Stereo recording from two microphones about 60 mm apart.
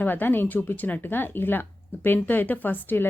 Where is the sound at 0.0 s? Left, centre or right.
Left.